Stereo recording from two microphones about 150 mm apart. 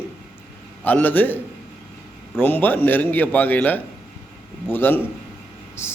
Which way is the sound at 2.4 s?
10° left (ahead or behind).